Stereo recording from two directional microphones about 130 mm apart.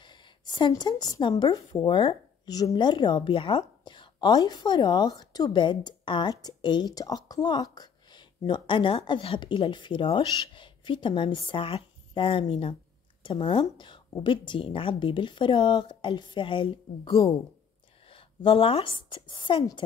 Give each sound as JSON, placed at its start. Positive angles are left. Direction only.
{"t": 0.0, "sound": "a woman's voice", "side_deg": 35}